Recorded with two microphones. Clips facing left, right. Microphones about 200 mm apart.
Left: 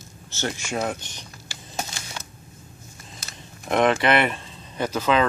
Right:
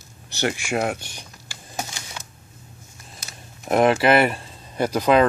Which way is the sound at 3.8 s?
5° right (ahead or behind).